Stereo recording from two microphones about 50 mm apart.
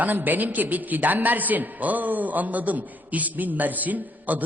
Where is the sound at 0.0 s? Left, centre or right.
Right.